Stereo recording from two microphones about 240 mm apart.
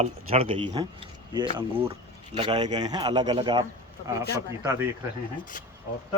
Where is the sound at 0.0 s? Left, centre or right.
Right.